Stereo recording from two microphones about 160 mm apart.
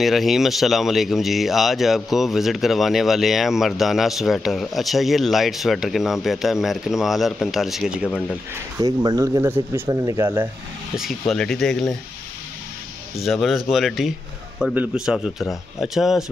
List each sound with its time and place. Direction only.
0.0 s speech: centre (ahead or behind)
8.7 s speech: 20° right (ahead or behind)
11.0 s speech: centre (ahead or behind)
13.2 s speech: centre (ahead or behind)